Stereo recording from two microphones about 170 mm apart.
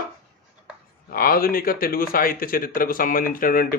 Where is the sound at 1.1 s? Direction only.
60° left (ahead or behind).